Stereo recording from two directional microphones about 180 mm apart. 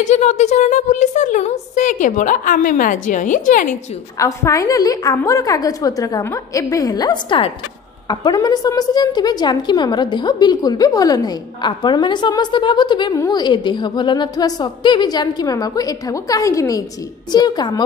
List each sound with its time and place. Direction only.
0.0 s a woman's voice: 40° left (ahead or behind)
4.2 s a woman's voice: 15° left (ahead or behind)